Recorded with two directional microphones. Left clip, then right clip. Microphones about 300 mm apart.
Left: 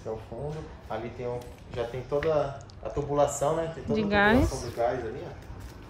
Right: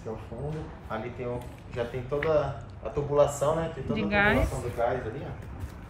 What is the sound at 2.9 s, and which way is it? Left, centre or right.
Speech, left.